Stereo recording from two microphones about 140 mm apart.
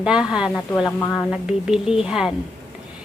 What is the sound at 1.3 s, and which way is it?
A woman's voice, 5° right (ahead or behind).